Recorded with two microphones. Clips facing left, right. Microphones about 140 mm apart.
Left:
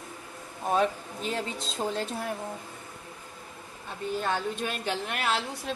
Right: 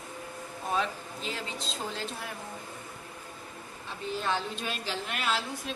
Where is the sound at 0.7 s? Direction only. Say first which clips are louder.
Left 5 dB; 50° left (ahead or behind).